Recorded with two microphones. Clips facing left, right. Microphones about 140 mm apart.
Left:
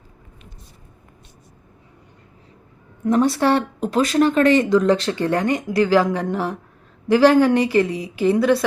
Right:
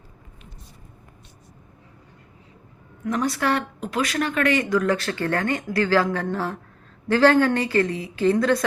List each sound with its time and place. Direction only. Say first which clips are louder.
3.0 s a woman's voice: left 7 dB; 30° left (ahead or behind); by 8.6 s 10° left (ahead or behind)